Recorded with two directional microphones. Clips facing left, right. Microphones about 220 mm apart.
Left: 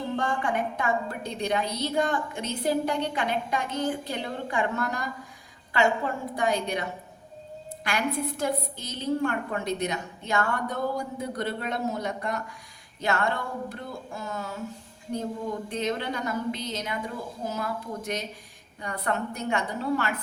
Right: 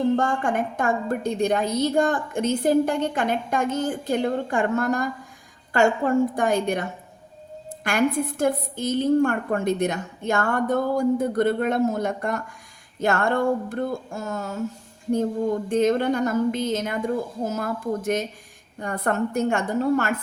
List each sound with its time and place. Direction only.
0.2 s a woman's voice: 45° right (ahead or behind)
7.9 s a woman's voice: 50° right (ahead or behind)
15.7 s a woman's voice: 45° right (ahead or behind)